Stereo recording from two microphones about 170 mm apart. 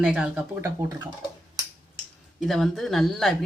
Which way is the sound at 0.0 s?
5° right (ahead or behind).